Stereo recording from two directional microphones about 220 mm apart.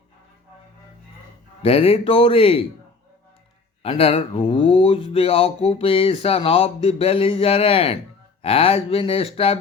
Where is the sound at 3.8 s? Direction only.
25° left (ahead or behind).